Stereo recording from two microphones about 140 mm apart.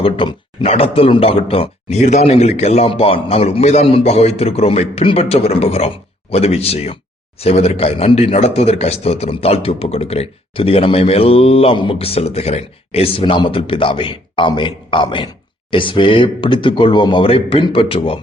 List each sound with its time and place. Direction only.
0.0 s speech: 40° left (ahead or behind)
2.0 s speech: 55° left (ahead or behind)